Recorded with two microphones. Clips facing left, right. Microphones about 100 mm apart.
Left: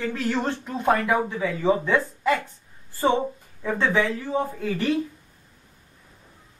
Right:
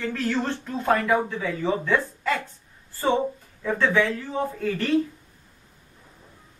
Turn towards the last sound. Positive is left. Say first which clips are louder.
# left 1 dB
turn(degrees=15)  # may be behind; listen again after turning